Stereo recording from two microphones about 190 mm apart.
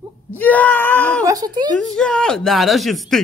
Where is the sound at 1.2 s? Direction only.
20° right (ahead or behind).